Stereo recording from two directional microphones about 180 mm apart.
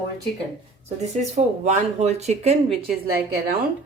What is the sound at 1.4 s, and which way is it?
Speech, 40° right (ahead or behind).